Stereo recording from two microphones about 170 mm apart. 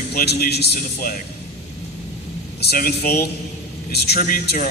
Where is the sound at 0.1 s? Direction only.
70° left (ahead or behind).